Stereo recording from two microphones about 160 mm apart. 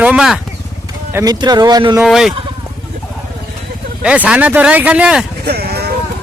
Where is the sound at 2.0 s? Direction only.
Centre (ahead or behind).